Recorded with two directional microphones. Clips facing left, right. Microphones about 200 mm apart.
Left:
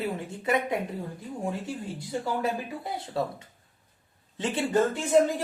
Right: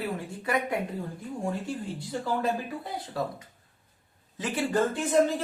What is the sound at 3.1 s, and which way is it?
Speech, 25° left (ahead or behind).